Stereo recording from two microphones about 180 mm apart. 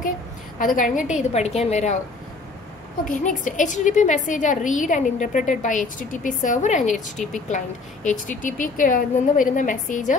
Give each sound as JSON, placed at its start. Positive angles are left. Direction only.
{"t": 0.6, "sound": "a woman's voice", "side_deg": 50}
{"t": 3.1, "sound": "a woman's voice", "side_deg": 45}